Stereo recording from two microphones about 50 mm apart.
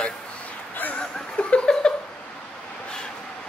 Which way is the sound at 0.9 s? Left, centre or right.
Centre.